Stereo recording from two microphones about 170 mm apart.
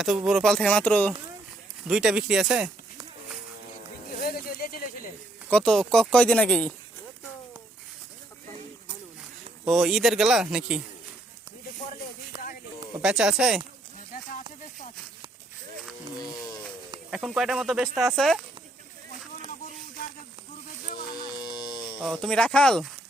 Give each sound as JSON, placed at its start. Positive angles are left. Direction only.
{"t": 0.0, "sound": "speech", "side_deg": 0}
{"t": 1.9, "sound": "speech", "side_deg": -5}
{"t": 4.1, "sound": "a sound", "side_deg": 60}
{"t": 5.5, "sound": "speech", "side_deg": 5}
{"t": 9.6, "sound": "speech", "side_deg": 0}
{"t": 12.3, "sound": "a sound", "side_deg": -25}
{"t": 13.0, "sound": "speech", "side_deg": -5}
{"t": 16.1, "sound": "speech", "side_deg": 25}
{"t": 17.1, "sound": "speech", "side_deg": -5}
{"t": 21.2, "sound": "a sound", "side_deg": 25}
{"t": 22.0, "sound": "speech", "side_deg": 0}